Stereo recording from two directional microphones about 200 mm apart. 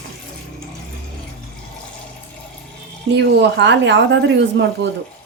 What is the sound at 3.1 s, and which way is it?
A woman's voice, 60° right (ahead or behind).